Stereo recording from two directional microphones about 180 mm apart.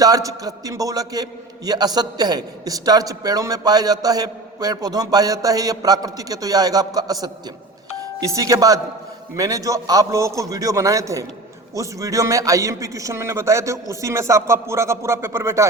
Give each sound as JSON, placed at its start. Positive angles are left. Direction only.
{"t": 0.0, "sound": "a man's voice", "side_deg": -20}